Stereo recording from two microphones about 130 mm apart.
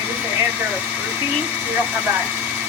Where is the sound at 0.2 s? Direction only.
10° right (ahead or behind).